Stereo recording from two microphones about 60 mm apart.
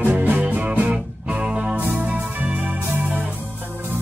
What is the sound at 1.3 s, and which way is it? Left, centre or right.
Music, centre.